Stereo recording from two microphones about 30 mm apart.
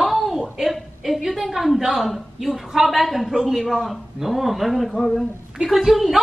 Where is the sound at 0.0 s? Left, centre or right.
Centre.